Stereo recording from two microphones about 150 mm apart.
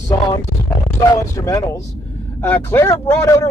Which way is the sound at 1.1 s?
20° left (ahead or behind).